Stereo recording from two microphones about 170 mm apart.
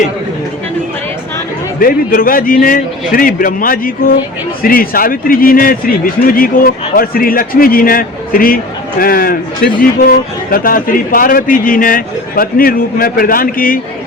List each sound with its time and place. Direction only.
1.8 s a man's voice: 55° left (ahead or behind)